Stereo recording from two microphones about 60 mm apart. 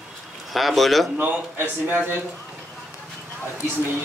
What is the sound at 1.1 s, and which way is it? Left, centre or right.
A man's voice, right.